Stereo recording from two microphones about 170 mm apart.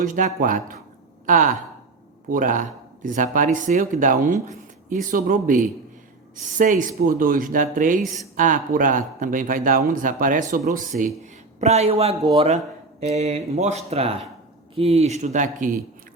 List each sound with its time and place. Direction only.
0.3 s speech: 55° right (ahead or behind)